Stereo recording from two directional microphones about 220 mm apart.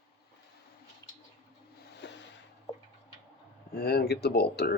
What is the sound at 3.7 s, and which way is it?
Speech, 45° left (ahead or behind).